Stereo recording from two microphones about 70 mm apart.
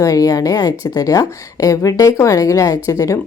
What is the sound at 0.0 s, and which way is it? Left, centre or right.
A woman's voice, left.